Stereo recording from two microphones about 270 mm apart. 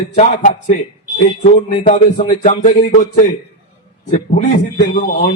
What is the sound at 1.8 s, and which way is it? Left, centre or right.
A man's voice, left.